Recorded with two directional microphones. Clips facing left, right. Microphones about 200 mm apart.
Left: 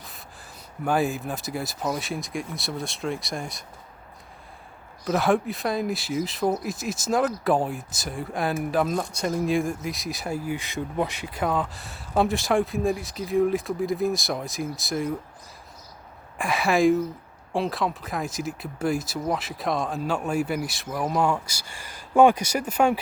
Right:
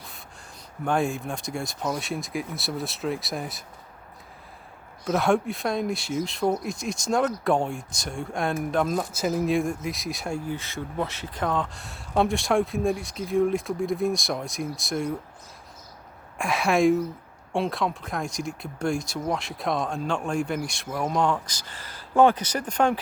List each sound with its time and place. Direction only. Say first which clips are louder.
0.9 s speech: left 1 dB; 5° left (ahead or behind)
5.0 s speech: even; centre (ahead or behind)
16.4 s speech: even; centre (ahead or behind)